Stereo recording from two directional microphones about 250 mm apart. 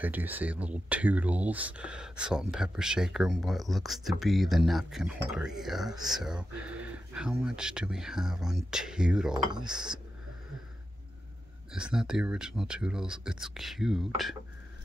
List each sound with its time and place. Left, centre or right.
0.0 s speech: centre
9.3 s cutlery: centre
9.7 s speech: centre
11.7 s speech: centre